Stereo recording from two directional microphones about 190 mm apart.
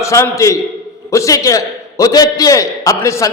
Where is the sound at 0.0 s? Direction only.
15° left (ahead or behind).